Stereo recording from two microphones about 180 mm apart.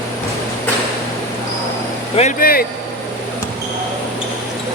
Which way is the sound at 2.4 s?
55° left (ahead or behind).